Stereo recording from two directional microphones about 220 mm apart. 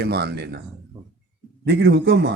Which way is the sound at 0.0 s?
45° right (ahead or behind).